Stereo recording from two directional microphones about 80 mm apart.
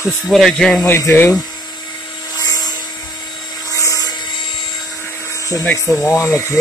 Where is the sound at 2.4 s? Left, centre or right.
Left.